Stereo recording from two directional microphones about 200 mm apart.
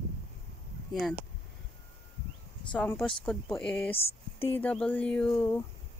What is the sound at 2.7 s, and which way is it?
Speech, 5° left (ahead or behind).